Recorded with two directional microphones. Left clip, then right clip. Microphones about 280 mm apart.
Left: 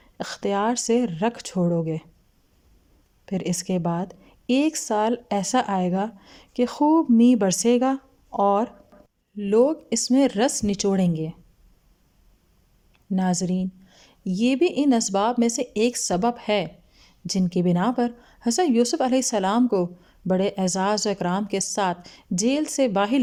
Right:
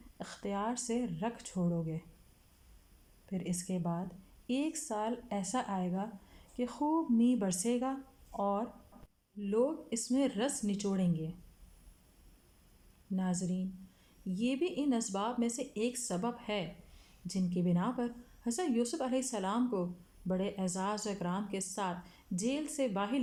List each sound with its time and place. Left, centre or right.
0.2 s a woman's voice: left
3.2 s a woman's voice: left
13.1 s a woman's voice: left